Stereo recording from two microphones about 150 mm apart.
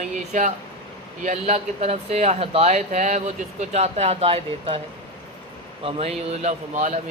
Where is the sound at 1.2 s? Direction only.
50° right (ahead or behind).